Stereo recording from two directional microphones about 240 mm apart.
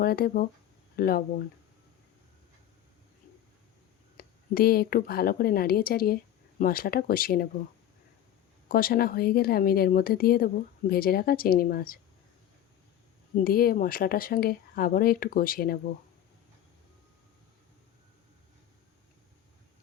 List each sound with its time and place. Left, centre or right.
0.0 s speech: left
4.2 s speech: left
8.7 s speech: left
13.3 s speech: left